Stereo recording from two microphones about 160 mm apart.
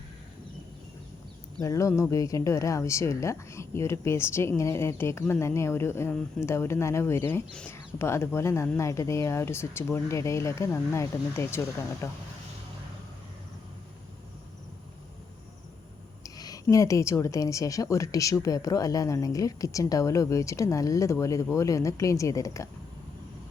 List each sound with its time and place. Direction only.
1.6 s speech: 20° left (ahead or behind)
16.2 s a woman's voice: 20° left (ahead or behind)